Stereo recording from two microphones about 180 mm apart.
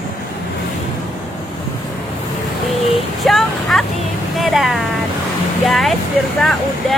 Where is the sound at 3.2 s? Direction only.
Centre (ahead or behind).